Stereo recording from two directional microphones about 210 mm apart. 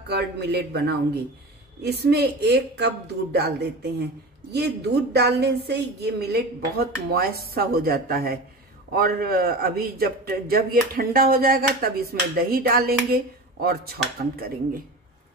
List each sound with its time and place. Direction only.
0.1 s a man's voice: 50° right (ahead or behind)